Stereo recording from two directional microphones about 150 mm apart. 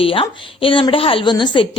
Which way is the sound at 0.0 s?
35° left (ahead or behind).